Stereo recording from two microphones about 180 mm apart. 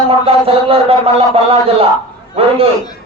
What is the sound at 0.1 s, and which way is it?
A man's voice, 30° right (ahead or behind).